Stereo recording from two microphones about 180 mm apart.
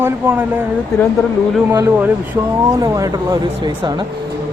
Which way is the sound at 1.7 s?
15° right (ahead or behind).